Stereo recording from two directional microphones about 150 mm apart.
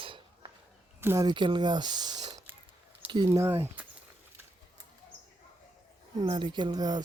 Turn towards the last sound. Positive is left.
turn(degrees=-25)  # may be behind; listen again after turning